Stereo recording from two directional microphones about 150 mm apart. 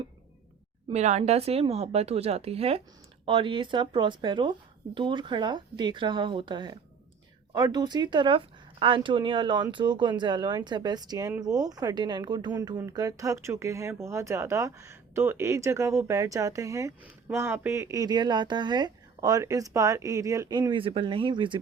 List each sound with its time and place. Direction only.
0.9 s speech: 50° right (ahead or behind); by 21.6 s 30° right (ahead or behind)